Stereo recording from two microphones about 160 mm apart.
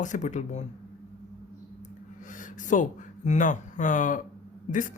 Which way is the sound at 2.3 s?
55° left (ahead or behind).